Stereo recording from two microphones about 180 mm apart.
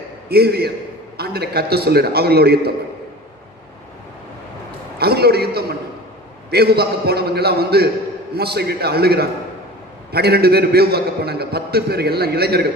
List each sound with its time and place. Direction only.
0.3 s a man's voice: 60° right (ahead or behind)
4.9 s a man's voice: 60° right (ahead or behind)